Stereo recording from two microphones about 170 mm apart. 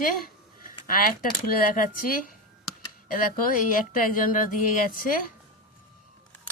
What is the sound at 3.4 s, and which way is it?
Speech, 55° left (ahead or behind).